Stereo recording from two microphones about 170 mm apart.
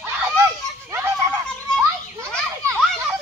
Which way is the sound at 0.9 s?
15° right (ahead or behind).